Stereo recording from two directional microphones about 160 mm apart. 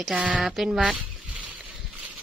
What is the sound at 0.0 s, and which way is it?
Speech, 5° right (ahead or behind).